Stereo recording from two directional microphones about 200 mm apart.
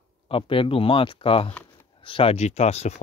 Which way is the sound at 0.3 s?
25° left (ahead or behind).